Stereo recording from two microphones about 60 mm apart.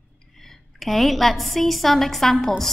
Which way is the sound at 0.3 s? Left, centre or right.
Centre.